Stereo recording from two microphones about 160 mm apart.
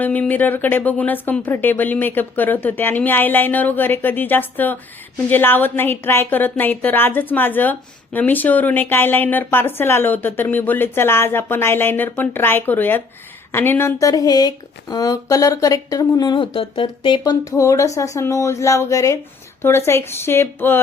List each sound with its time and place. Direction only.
0.0 s speech: 10° left (ahead or behind)